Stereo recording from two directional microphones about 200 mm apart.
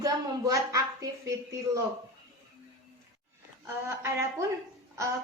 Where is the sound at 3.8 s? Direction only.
15° right (ahead or behind).